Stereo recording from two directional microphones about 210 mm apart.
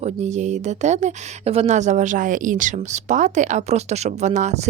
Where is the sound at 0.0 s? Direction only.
35° right (ahead or behind).